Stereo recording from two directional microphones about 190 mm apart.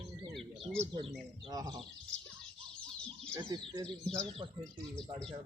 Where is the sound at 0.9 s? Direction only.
25° right (ahead or behind).